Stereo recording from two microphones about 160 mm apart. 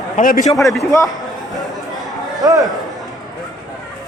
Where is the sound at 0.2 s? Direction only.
55° left (ahead or behind).